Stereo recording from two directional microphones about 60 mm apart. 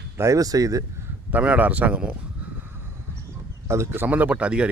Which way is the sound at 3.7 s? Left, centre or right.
Right.